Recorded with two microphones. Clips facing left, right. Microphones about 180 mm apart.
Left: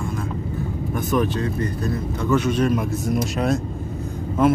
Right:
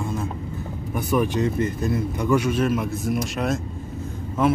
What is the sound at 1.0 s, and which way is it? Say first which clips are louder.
Speech: right 1 dB; 15° right (ahead or behind).